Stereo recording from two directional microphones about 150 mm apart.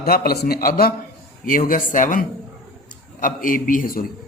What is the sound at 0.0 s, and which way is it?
Speech, 90° left.